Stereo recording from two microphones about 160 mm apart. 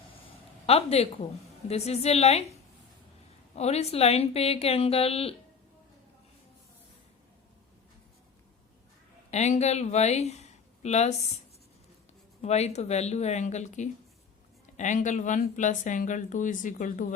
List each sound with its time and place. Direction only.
0.6 s a woman's voice: 40° left (ahead or behind)
3.5 s a woman's voice: 40° left (ahead or behind)
9.3 s speech: 45° left (ahead or behind)
12.4 s speech: 45° left (ahead or behind)